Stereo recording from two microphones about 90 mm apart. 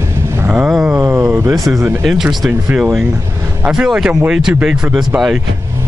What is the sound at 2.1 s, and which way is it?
Speech, 5° right (ahead or behind).